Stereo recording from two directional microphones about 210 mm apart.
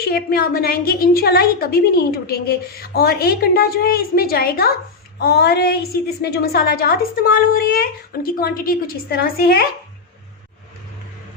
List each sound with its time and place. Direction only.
0.0 s a woman's voice: 45° left (ahead or behind)